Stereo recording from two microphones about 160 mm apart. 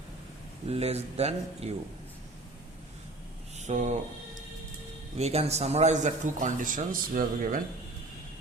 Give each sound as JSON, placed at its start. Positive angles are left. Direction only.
{"t": 0.7, "sound": "speech", "side_deg": -40}
{"t": 3.6, "sound": "speech", "side_deg": -50}
{"t": 5.1, "sound": "a man's voice", "side_deg": -40}